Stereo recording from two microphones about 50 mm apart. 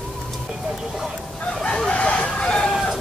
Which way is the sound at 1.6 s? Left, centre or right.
Centre.